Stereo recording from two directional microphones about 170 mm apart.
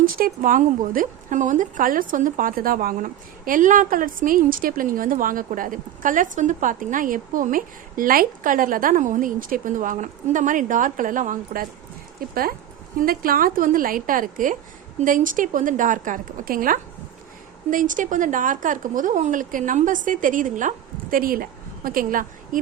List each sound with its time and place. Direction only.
0.2 s a woman's voice: 55° right (ahead or behind)